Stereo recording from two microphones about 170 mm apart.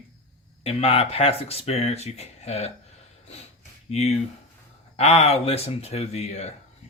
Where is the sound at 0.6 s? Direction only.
35° left (ahead or behind).